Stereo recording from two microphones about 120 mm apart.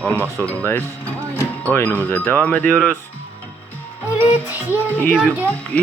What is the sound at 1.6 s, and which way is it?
Speech, 15° left (ahead or behind).